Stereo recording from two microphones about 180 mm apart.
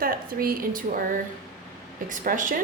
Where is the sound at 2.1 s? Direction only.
45° right (ahead or behind).